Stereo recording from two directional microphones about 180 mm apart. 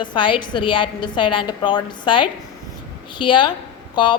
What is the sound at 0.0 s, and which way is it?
A woman's voice, 25° left (ahead or behind).